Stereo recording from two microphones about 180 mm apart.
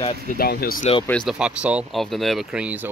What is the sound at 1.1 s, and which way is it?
Speech, centre (ahead or behind).